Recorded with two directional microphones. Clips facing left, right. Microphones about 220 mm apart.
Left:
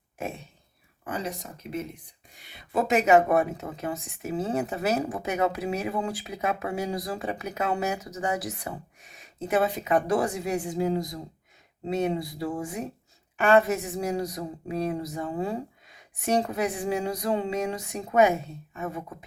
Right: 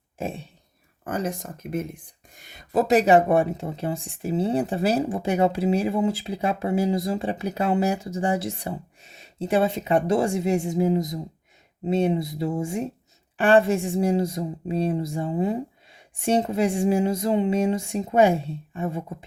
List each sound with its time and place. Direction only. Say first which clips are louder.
0.2 s speech: right 4 dB; 30° right (ahead or behind)
1.0 s speech: right 5 dB; 50° right (ahead or behind); by 19.1 s 25° right (ahead or behind)